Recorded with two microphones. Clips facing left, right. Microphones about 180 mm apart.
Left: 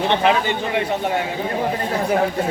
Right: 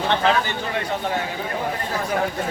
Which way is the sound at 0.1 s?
20° left (ahead or behind).